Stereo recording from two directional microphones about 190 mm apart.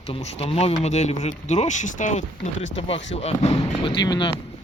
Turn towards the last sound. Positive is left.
turn(degrees=25)  # may be behind; listen again after turning